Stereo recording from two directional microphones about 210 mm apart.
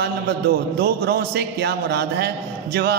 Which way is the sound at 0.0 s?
50° right (ahead or behind).